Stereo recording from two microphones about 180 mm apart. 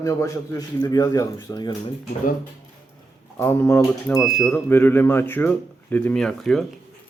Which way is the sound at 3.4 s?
10° left (ahead or behind).